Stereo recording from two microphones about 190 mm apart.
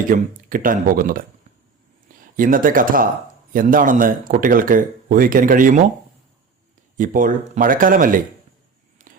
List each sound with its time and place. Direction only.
0.1 s speech: 45° right (ahead or behind)
2.3 s speech: 45° right (ahead or behind)
6.9 s speech: 45° right (ahead or behind)
9.1 s a sound: 45° right (ahead or behind)